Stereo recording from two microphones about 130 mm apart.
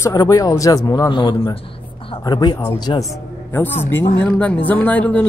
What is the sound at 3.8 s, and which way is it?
Speech, 20° left (ahead or behind).